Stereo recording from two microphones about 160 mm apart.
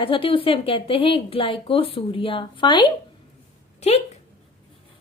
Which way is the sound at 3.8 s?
40° left (ahead or behind).